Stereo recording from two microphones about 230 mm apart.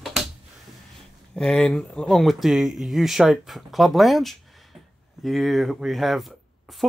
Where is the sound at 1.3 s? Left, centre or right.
Centre.